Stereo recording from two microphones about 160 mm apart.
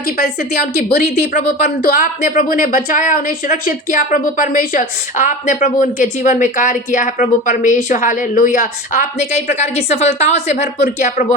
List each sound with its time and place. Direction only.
0.2 s a woman's voice: 75° left (ahead or behind); by 11.3 s 50° left (ahead or behind)